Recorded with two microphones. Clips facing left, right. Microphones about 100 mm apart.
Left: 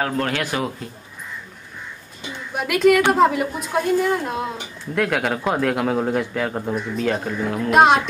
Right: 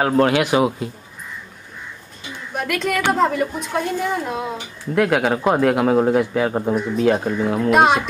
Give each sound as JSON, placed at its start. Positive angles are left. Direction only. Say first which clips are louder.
{"t": 0.0, "sound": "a man's voice", "louder": "right 7 dB", "side_deg": -20}
{"t": 2.5, "sound": "a woman's voice", "louder": "left 6 dB", "side_deg": 5}